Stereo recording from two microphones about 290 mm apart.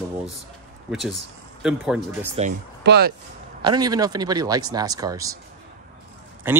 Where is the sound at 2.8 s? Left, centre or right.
Right.